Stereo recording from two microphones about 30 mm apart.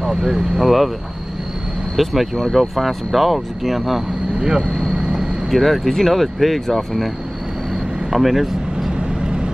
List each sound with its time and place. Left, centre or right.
0.6 s speech: centre
2.0 s speech: centre
4.4 s speech: right
4.9 s vehicle: right
5.5 s speech: centre
8.1 s vehicle: centre